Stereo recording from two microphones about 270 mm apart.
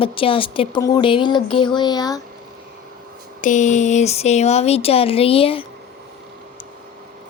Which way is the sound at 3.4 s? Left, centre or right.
Left.